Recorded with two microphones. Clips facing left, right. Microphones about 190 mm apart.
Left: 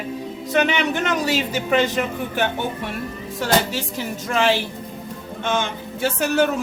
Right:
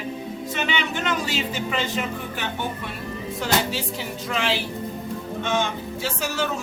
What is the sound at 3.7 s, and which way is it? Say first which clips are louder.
Speech: left 2 dB; 50° left (ahead or behind).